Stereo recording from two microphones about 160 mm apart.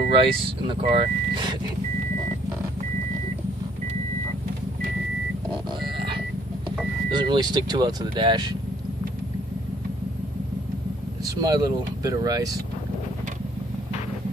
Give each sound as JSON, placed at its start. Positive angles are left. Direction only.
{"t": 0.2, "sound": "speech", "side_deg": -35}
{"t": 7.1, "sound": "speech", "side_deg": -30}
{"t": 11.4, "sound": "speech", "side_deg": -25}